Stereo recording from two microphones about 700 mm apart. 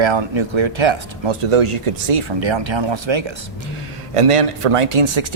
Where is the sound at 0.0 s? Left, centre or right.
Right.